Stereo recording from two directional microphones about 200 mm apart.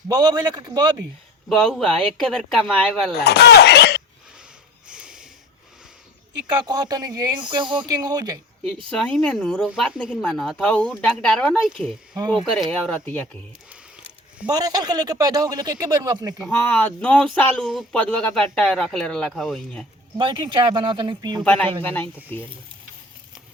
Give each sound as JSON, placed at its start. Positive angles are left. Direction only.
{"t": 0.1, "sound": "speech", "side_deg": -20}
{"t": 1.5, "sound": "speech", "side_deg": 0}
{"t": 3.2, "sound": "speech", "side_deg": 55}
{"t": 4.9, "sound": "a sound", "side_deg": -5}
{"t": 6.5, "sound": "speech", "side_deg": -20}
{"t": 8.6, "sound": "speech", "side_deg": 5}
{"t": 14.5, "sound": "speech", "side_deg": -20}
{"t": 16.4, "sound": "speech", "side_deg": 5}
{"t": 20.1, "sound": "speech", "side_deg": -25}
{"t": 21.4, "sound": "speech", "side_deg": 5}